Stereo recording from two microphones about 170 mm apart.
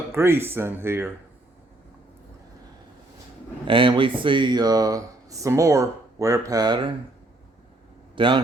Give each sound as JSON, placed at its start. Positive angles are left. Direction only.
{"t": 0.1, "sound": "speech", "side_deg": -15}
{"t": 3.7, "sound": "speech", "side_deg": -30}
{"t": 8.1, "sound": "speech", "side_deg": -30}